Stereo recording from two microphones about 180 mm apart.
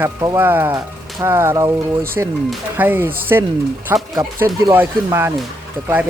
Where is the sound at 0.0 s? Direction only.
15° right (ahead or behind).